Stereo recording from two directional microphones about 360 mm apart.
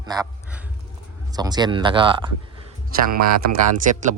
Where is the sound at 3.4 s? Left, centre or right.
Right.